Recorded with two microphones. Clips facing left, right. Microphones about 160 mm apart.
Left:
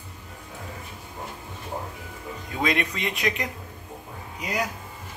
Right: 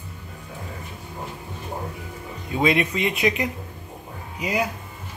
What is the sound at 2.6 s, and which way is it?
Speech, 5° right (ahead or behind).